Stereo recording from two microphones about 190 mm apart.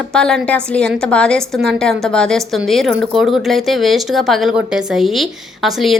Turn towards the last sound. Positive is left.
turn(degrees=0)  # may be behind; listen again after turning